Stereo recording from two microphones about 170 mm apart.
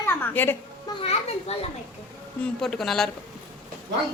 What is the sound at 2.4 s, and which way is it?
Speech, 5° left (ahead or behind).